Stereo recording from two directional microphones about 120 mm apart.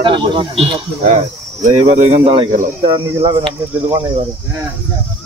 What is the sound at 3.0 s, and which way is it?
Speech, 25° right (ahead or behind).